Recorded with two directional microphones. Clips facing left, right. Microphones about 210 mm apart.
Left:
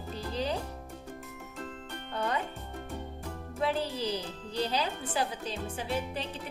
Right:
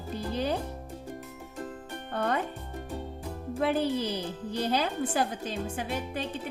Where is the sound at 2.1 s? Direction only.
55° right (ahead or behind).